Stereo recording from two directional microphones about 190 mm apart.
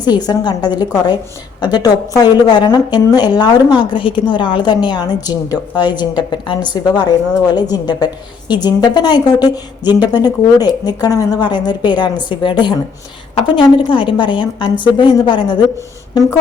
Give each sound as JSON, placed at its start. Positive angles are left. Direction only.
{"t": 0.0, "sound": "a woman's voice", "side_deg": 20}